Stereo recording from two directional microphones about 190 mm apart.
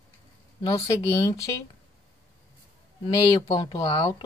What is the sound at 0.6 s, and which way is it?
Speech, 20° left (ahead or behind).